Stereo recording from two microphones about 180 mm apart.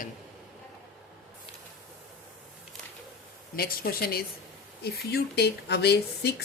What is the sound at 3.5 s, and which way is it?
Speech, 55° left (ahead or behind).